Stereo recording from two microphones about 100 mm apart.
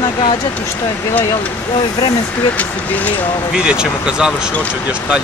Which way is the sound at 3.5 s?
10° right (ahead or behind).